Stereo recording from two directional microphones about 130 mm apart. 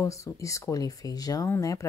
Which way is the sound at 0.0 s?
25° left (ahead or behind).